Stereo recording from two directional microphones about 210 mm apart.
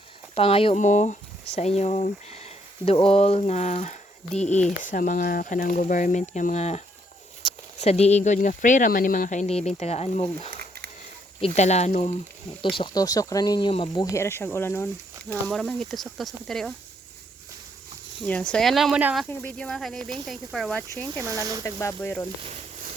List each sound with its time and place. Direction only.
0.3 s speech: 25° left (ahead or behind)
12.7 s speech: 20° left (ahead or behind); by 16.7 s centre (ahead or behind)
18.3 s speech: 5° left (ahead or behind)
19.4 s speech: 5° left (ahead or behind)
20.9 s speech: 15° left (ahead or behind)